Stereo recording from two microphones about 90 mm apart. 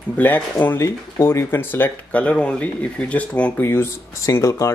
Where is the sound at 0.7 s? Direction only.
35° left (ahead or behind); by 3.5 s 15° left (ahead or behind).